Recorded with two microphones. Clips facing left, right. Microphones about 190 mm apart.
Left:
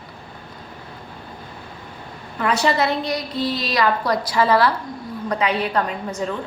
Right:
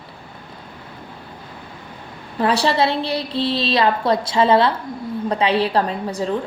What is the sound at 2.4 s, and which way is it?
A woman's voice, 30° right (ahead or behind).